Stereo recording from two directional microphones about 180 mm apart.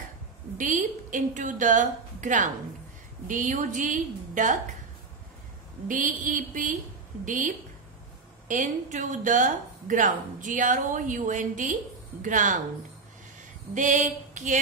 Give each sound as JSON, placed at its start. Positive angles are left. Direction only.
{"t": 0.6, "sound": "speech", "side_deg": -45}
{"t": 5.9, "sound": "speech", "side_deg": -50}
{"t": 13.7, "sound": "speech", "side_deg": -45}